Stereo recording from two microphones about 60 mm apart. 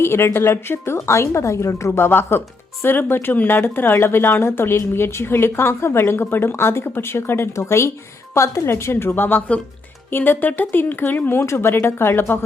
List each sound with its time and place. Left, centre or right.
0.0 s a woman's voice: left
1.9 s speech: left
7.5 s a woman's voice: left